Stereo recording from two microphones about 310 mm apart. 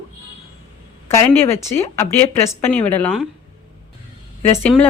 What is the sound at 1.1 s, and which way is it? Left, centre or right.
Speech, centre.